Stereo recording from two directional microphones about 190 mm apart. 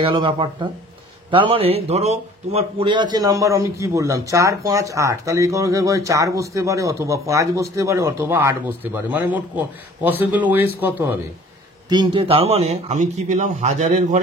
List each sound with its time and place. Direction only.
0.0 s speech: 25° right (ahead or behind); by 11.1 s 10° right (ahead or behind)
11.9 s speech: 25° right (ahead or behind)